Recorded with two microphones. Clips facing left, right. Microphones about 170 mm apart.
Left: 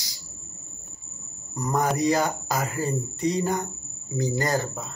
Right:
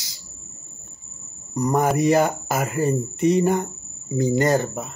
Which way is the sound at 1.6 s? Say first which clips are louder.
Right 5 dB; 20° right (ahead or behind).